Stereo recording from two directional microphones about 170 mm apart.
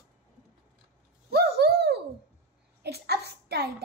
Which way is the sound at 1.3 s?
70° right (ahead or behind).